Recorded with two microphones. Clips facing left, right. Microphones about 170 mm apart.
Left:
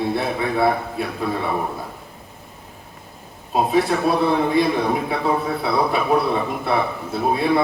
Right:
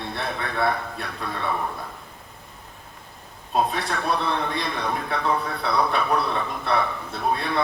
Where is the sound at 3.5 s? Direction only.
5° left (ahead or behind).